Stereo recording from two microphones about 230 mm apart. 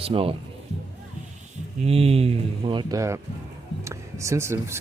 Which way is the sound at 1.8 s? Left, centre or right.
Right.